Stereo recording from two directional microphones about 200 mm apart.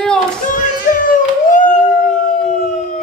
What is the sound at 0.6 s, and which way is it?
Music, 40° left (ahead or behind).